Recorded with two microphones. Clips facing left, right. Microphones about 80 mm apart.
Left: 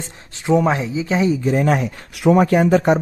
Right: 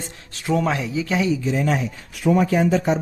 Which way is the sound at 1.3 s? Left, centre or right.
Left.